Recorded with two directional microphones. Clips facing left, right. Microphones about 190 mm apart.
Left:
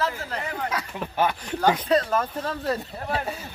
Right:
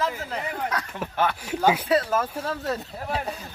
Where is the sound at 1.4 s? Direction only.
5° right (ahead or behind).